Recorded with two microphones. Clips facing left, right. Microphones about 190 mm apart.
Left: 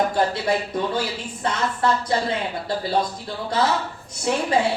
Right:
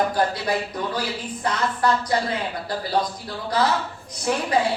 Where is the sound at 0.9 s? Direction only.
25° left (ahead or behind).